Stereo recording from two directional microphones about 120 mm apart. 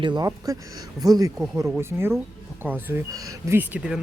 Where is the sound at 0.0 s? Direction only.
40° right (ahead or behind).